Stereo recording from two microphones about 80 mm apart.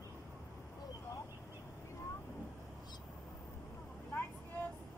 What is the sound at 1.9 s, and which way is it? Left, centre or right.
Vehicle, left.